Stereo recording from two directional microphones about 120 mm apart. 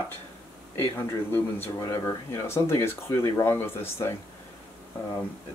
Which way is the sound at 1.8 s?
30° left (ahead or behind).